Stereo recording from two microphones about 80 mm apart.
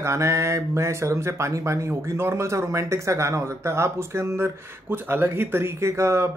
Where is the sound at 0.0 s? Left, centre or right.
Right.